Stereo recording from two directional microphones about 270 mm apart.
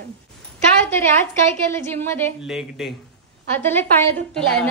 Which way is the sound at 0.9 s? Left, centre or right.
Centre.